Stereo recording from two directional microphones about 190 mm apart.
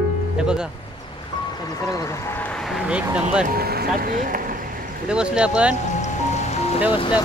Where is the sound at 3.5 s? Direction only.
50° right (ahead or behind).